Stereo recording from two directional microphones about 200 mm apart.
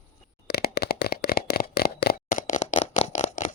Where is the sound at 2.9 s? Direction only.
35° left (ahead or behind).